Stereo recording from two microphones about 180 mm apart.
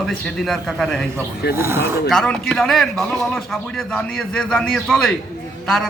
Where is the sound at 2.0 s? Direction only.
5° left (ahead or behind).